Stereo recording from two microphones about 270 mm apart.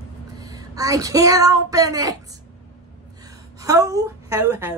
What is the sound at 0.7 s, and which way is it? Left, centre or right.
Speech, centre.